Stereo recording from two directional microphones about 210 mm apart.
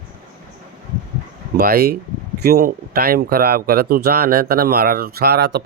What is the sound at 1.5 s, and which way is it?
Speech, 45° right (ahead or behind).